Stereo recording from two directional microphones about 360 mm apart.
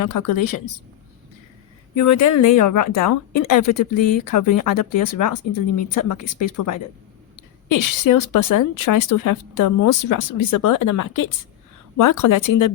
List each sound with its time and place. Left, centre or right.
0.0 s a woman's voice: left
2.0 s speech: left
7.7 s a woman's voice: left